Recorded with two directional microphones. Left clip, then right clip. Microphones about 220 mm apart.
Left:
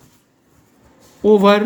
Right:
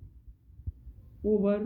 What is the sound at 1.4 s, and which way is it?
Speech, 45° left (ahead or behind).